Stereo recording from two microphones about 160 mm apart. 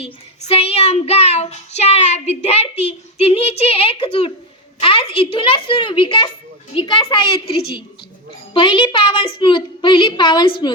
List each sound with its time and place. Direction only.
0.0 s child singing: 40° left (ahead or behind)
6.7 s a woman's voice: 30° left (ahead or behind)
8.5 s child singing: 30° left (ahead or behind)